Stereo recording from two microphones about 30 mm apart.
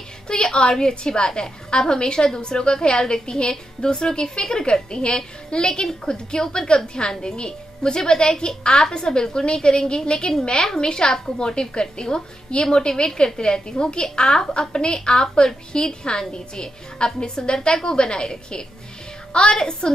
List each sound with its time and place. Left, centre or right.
0.3 s a woman's voice: left